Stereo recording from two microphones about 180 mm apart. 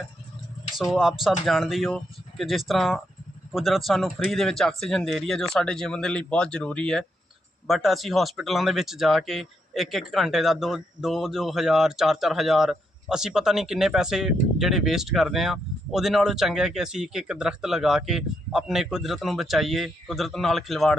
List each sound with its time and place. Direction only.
0.8 s speech: centre (ahead or behind)